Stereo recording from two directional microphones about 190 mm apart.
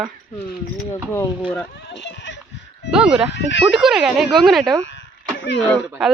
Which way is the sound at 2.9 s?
5° right (ahead or behind).